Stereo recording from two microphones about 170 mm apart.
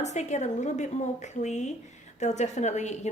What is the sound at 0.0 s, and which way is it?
A woman's voice, 40° left (ahead or behind).